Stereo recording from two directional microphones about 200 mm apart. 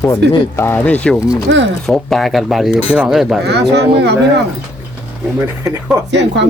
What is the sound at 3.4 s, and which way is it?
Speech, 55° right (ahead or behind).